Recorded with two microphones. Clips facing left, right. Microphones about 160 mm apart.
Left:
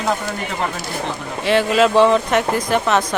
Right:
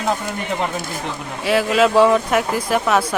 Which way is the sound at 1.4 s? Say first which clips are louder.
Left 1 dB; 5° right (ahead or behind).